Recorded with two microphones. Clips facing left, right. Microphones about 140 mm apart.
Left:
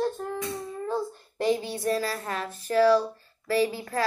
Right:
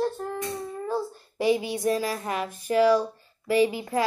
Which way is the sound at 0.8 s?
10° right (ahead or behind).